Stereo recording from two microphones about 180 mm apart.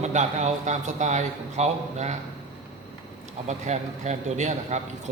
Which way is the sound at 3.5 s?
40° right (ahead or behind).